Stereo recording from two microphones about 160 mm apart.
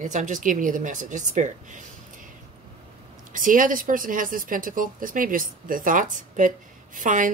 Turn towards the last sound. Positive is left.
turn(degrees=-55)  # may be behind; listen again after turning